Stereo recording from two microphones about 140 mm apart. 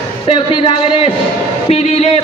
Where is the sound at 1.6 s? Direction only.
50° left (ahead or behind).